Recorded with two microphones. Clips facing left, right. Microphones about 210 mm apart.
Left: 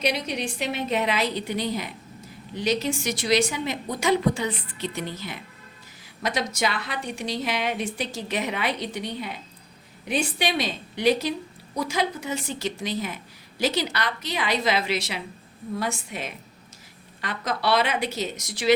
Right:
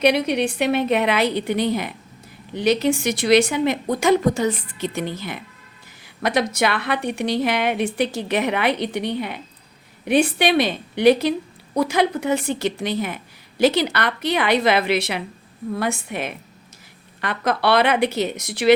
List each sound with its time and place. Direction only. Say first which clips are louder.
0.0 s a woman's voice: right 9 dB; 60° right (ahead or behind)